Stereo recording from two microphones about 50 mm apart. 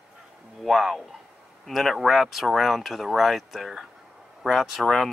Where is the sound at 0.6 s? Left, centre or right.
Centre.